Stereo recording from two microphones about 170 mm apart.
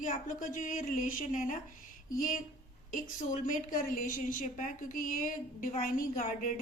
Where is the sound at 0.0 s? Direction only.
50° left (ahead or behind).